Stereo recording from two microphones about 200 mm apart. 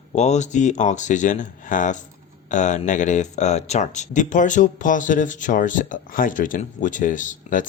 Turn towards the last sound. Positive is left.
turn(degrees=40)  # may be behind; listen again after turning